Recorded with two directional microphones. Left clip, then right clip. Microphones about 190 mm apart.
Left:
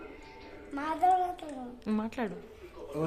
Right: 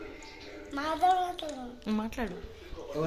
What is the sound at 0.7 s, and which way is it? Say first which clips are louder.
A woman's voice: even; centre (ahead or behind).